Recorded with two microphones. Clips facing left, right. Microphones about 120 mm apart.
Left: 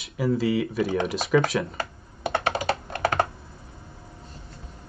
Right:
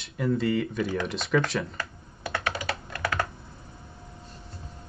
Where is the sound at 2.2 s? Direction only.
25° left (ahead or behind).